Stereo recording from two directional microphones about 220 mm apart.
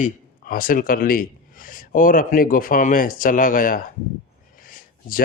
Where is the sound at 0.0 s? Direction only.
40° left (ahead or behind).